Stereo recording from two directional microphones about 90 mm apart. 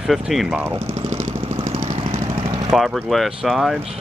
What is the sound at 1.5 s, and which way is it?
Vehicle, 90° right.